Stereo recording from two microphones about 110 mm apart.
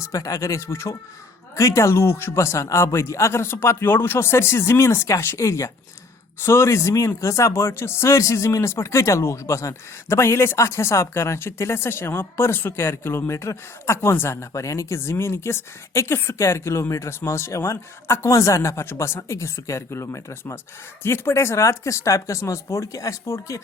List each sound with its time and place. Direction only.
0.1 s speech: 30° left (ahead or behind)